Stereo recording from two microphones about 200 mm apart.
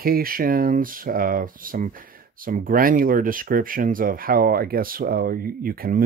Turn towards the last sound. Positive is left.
turn(degrees=-45)  # may be behind; listen again after turning